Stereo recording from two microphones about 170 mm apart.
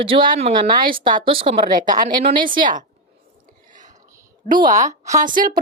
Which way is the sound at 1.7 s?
50° right (ahead or behind).